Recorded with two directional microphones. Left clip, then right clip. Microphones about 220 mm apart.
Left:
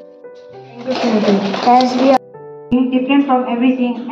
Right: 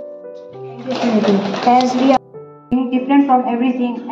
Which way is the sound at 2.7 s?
10° right (ahead or behind).